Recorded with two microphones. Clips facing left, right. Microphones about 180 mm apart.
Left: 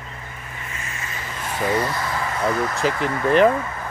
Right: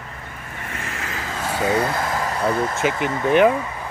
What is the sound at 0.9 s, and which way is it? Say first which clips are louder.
Vehicle: right 4 dB; 90° right.